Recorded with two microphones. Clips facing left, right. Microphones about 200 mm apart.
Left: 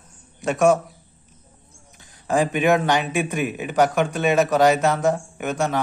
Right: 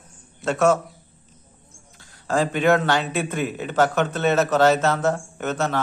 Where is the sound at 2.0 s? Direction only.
20° left (ahead or behind).